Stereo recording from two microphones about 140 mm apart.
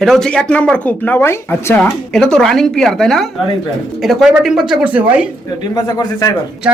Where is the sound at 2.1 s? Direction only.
5° left (ahead or behind); by 5.2 s 10° right (ahead or behind).